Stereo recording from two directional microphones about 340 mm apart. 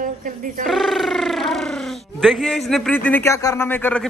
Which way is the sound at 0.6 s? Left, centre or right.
Centre.